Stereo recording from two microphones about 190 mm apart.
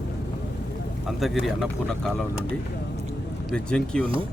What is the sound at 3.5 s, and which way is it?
Speech, 5° left (ahead or behind).